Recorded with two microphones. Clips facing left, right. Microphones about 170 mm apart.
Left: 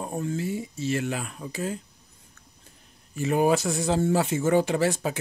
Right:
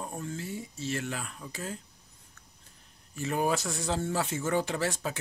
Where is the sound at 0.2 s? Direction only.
10° left (ahead or behind).